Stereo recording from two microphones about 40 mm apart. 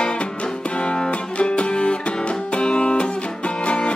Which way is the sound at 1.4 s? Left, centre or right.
Left.